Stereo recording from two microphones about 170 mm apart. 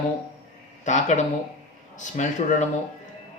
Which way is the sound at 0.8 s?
45° left (ahead or behind).